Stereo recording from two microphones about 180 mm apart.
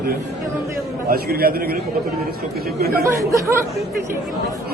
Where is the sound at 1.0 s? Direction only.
55° right (ahead or behind).